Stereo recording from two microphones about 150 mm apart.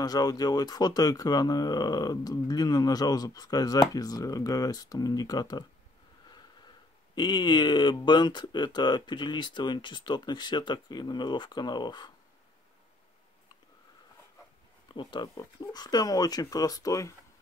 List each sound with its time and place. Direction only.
0.0 s speech: 25° left (ahead or behind)
7.2 s speech: 30° left (ahead or behind)
14.9 s speech: 30° left (ahead or behind)